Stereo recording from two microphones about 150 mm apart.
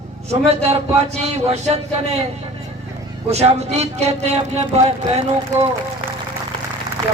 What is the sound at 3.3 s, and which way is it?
Speech, 45° right (ahead or behind).